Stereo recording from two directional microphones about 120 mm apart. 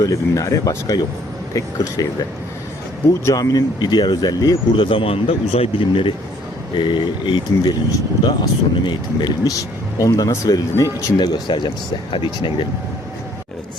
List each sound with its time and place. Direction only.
0.0 s speech: 30° left (ahead or behind)
3.2 s speech: 30° left (ahead or behind)
4.9 s a man's voice: 50° left (ahead or behind); by 10.8 s 30° left (ahead or behind)
11.2 s a man's voice: 40° left (ahead or behind)